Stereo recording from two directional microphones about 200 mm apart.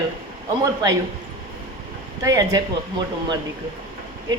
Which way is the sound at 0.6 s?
15° right (ahead or behind).